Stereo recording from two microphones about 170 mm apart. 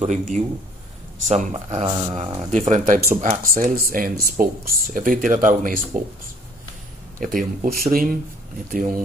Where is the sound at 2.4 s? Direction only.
45° right (ahead or behind).